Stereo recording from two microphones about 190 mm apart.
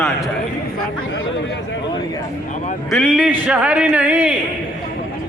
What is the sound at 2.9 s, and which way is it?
Speech, 5° right (ahead or behind).